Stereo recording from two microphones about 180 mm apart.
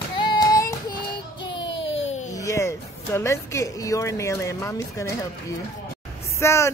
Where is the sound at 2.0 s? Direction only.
40° left (ahead or behind).